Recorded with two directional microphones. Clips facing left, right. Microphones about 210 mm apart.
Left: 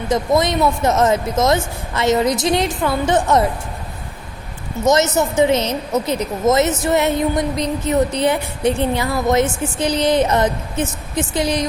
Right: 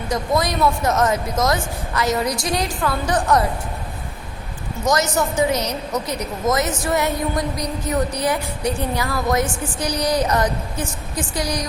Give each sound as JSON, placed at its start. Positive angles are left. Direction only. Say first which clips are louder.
{"t": 0.1, "sound": "speech", "louder": "left 4 dB", "side_deg": 20}
{"t": 4.9, "sound": "speech", "louder": "left 4 dB", "side_deg": 20}